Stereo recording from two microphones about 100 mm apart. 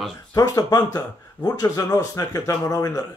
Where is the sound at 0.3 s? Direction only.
40° left (ahead or behind).